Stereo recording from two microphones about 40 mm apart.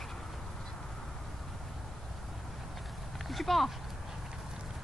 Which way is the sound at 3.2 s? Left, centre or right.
Centre.